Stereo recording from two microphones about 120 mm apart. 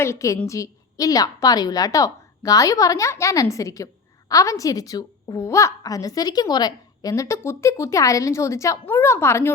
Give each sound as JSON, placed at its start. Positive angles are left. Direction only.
{"t": 0.0, "sound": "a woman's voice", "side_deg": 25}